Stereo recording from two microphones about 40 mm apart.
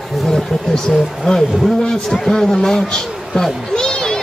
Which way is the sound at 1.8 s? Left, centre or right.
Centre.